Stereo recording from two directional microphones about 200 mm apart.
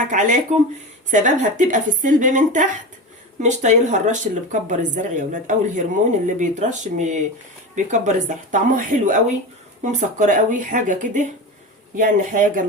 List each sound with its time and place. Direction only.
0.1 s speech: 40° right (ahead or behind)